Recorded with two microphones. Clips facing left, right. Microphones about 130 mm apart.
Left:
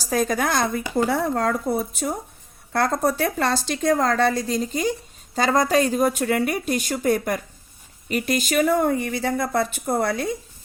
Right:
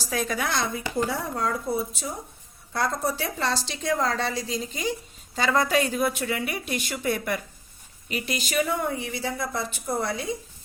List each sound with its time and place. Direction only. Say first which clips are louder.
0.1 s a woman's voice: left 6 dB; 45° left (ahead or behind)
0.9 s a woman's voice: left 7 dB; 60° left (ahead or behind)